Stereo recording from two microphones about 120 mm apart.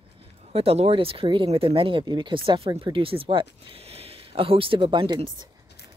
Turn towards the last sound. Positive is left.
turn(degrees=-40)  # may be behind; listen again after turning